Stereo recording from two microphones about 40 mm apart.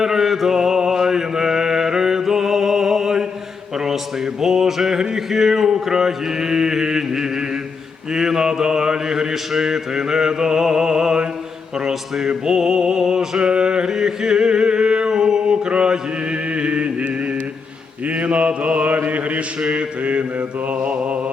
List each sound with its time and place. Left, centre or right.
0.0 s music: centre
0.9 s mantra: centre
3.8 s music: centre
8.1 s mantra: centre
11.9 s speech: centre
12.5 s music: centre
13.9 s mantra: centre; by 17.1 s right
18.1 s mantra: right